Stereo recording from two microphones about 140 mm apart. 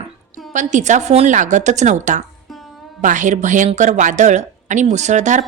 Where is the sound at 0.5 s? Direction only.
60° right (ahead or behind).